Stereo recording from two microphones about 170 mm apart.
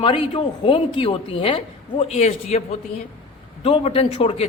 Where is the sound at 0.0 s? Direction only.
30° left (ahead or behind).